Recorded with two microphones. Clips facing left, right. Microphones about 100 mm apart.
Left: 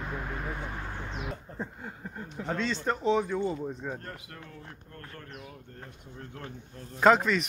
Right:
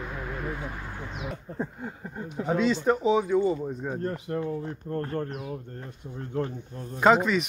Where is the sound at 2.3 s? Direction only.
10° right (ahead or behind).